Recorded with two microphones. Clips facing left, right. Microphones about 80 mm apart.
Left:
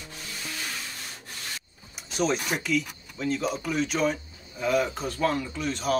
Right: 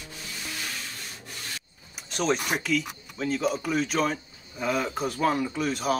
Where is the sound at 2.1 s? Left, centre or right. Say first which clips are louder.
Even; centre.